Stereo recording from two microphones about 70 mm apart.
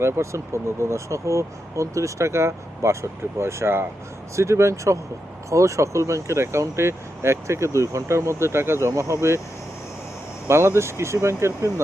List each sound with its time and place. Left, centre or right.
0.0 s speech: right
10.5 s speech: right